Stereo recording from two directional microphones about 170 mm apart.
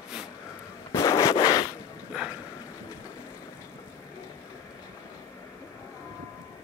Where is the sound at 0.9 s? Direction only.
15° left (ahead or behind).